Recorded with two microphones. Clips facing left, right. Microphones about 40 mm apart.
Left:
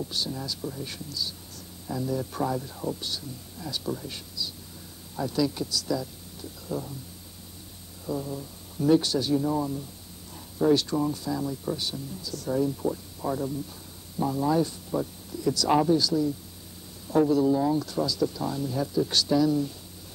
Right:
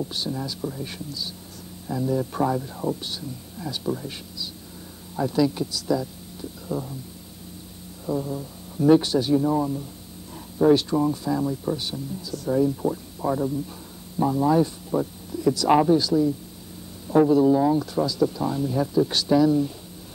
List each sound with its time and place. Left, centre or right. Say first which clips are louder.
0.0 s speech: right 3 dB; right
8.1 s speech: right 5 dB; centre